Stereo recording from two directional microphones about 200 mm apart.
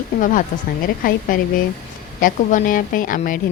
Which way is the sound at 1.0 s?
45° left (ahead or behind).